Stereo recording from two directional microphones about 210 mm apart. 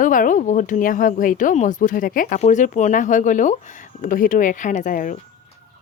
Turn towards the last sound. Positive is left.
turn(degrees=40)  # may be behind; listen again after turning